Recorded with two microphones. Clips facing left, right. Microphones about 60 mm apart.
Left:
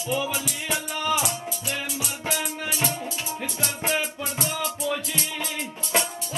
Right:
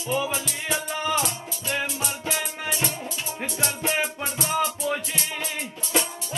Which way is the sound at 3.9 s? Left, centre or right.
Right.